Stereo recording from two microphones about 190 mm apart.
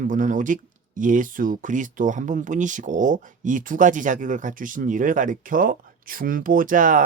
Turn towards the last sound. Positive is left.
turn(degrees=-45)  # may be behind; listen again after turning